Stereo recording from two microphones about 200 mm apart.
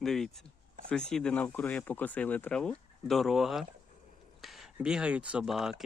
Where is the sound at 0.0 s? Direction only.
Centre (ahead or behind).